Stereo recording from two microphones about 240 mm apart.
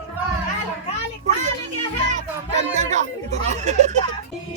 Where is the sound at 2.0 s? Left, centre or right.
Right.